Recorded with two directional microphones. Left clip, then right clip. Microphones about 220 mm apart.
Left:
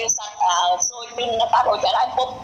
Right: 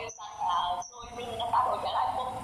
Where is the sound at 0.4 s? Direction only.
50° left (ahead or behind).